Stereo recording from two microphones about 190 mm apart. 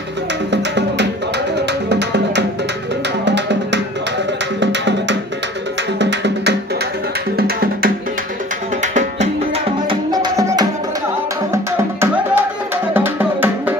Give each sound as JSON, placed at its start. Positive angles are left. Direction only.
{"t": 0.5, "sound": "music", "side_deg": -65}
{"t": 7.3, "sound": "music", "side_deg": -55}
{"t": 8.8, "sound": "music", "side_deg": -40}
{"t": 9.8, "sound": "music", "side_deg": -20}